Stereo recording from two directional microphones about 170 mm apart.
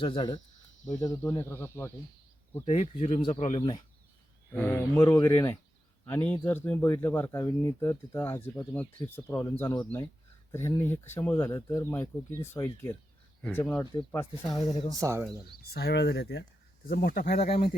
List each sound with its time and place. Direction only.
0.0 s speech: 30° left (ahead or behind); by 1.9 s 15° left (ahead or behind)
2.6 s speech: 40° left (ahead or behind)
4.5 s speech: 10° left (ahead or behind)
14.9 s speech: 20° right (ahead or behind)
15.7 s speech: 70° left (ahead or behind)
16.9 s speech: 60° left (ahead or behind); by 17.7 s 40° left (ahead or behind)